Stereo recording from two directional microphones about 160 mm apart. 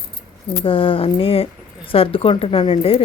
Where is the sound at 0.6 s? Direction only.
35° left (ahead or behind).